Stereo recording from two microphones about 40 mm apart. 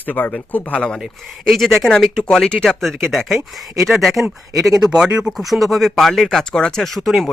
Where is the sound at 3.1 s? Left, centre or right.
Centre.